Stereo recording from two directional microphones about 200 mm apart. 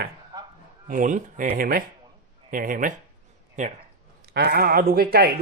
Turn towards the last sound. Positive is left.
turn(degrees=-50)  # may be behind; listen again after turning